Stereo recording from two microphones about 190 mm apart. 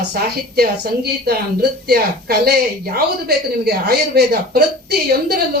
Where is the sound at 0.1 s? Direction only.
55° right (ahead or behind).